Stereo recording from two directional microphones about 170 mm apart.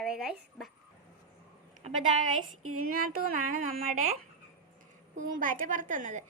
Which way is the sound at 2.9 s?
60° right (ahead or behind).